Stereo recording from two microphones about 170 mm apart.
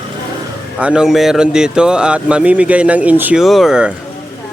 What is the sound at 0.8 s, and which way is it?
Speech, 5° right (ahead or behind).